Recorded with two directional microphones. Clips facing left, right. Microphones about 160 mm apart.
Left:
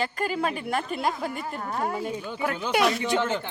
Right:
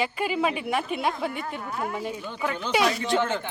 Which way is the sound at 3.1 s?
20° left (ahead or behind).